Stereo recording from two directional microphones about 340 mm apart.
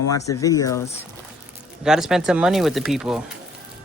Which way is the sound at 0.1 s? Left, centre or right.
Centre.